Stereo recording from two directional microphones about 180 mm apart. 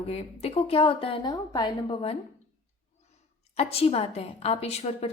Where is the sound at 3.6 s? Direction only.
35° left (ahead or behind).